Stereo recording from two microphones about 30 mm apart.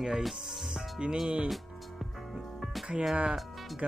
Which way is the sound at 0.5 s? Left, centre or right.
Right.